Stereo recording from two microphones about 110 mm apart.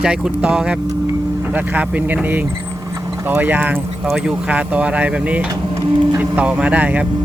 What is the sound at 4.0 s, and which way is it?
Speech, 5° right (ahead or behind).